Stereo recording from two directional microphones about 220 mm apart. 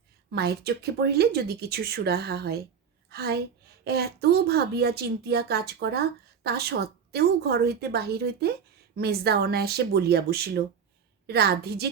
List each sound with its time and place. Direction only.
0.3 s a woman's voice: 45° right (ahead or behind)